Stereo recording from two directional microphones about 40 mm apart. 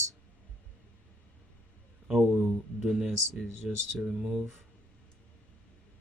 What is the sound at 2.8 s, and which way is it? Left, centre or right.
Speech, centre.